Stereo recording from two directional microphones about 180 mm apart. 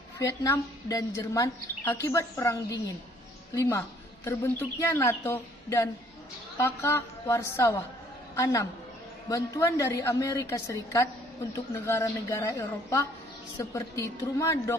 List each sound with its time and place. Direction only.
0.2 s a woman's voice: 20° left (ahead or behind)